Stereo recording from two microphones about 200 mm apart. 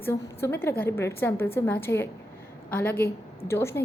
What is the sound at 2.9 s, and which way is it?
Speech, 50° left (ahead or behind).